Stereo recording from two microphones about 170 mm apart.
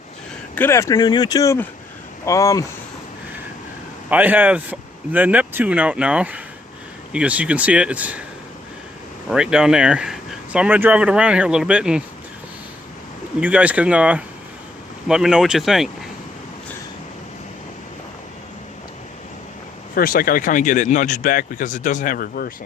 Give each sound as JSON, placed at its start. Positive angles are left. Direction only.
{"t": 0.5, "sound": "speech", "side_deg": 15}
{"t": 4.1, "sound": "speech", "side_deg": -10}
{"t": 9.3, "sound": "speech", "side_deg": -5}
{"t": 13.4, "sound": "speech", "side_deg": -10}
{"t": 19.9, "sound": "speech", "side_deg": 55}